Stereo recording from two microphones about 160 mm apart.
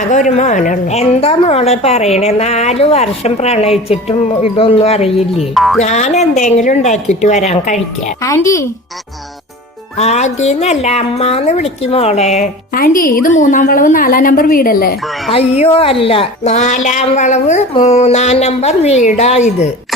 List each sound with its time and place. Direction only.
0.1 s a woman's voice: 50° left (ahead or behind)
5.5 s speech: centre (ahead or behind)
5.8 s speech: 45° left (ahead or behind)
8.2 s speech: 20° left (ahead or behind)
10.0 s speech: 45° left (ahead or behind)
12.7 s a woman's voice: 65° left (ahead or behind)
15.3 s speech: 40° left (ahead or behind)